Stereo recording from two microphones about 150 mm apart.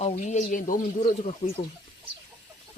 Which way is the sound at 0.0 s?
50° left (ahead or behind).